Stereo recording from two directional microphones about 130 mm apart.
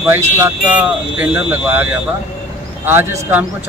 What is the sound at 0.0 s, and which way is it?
A man's voice, 15° right (ahead or behind).